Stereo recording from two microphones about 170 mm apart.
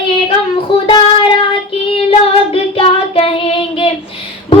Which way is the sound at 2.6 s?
35° left (ahead or behind).